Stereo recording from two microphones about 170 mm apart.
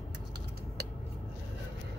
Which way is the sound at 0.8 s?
70° right (ahead or behind).